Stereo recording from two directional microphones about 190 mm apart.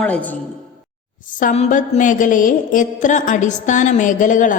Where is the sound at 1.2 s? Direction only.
45° left (ahead or behind).